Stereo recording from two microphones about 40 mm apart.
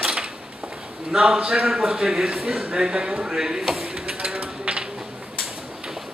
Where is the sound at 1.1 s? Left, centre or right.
Right.